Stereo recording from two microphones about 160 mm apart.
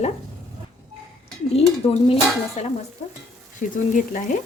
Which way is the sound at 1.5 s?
35° left (ahead or behind).